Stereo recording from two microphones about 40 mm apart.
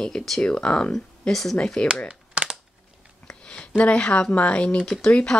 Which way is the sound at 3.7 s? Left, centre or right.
Left.